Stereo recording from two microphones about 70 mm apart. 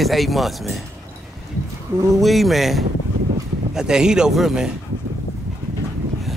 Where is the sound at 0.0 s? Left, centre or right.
Centre.